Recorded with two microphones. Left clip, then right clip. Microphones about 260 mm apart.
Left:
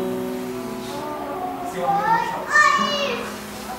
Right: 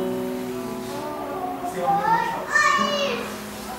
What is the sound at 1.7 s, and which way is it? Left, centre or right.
Children playing, centre.